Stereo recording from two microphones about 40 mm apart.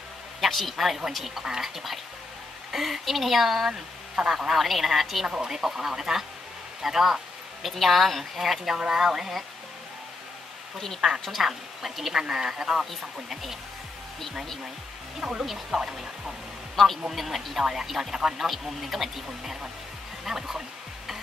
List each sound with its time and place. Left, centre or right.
0.4 s a woman's voice: centre
2.7 s a woman's voice: centre
4.1 s speech: centre
4.6 s a woman's voice: centre
5.2 s a woman's voice: centre
11.1 s a woman's voice: centre
11.4 s speech: centre
15.1 s speech: centre
15.4 s a woman's voice: centre
15.8 s speech: centre
16.7 s a woman's voice: centre